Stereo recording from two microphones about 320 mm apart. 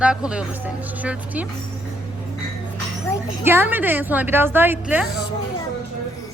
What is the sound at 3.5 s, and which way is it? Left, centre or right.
Speech, centre.